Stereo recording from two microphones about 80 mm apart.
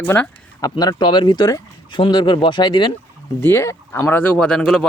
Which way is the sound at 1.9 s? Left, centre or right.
Left.